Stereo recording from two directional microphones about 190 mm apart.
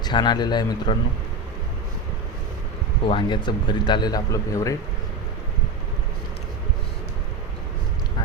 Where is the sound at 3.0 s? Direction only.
25° left (ahead or behind).